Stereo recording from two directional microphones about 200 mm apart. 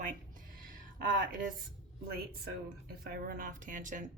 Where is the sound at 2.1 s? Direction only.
50° right (ahead or behind).